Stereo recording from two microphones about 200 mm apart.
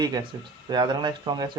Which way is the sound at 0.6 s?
20° right (ahead or behind).